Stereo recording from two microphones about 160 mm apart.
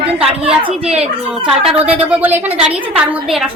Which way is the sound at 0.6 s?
40° right (ahead or behind).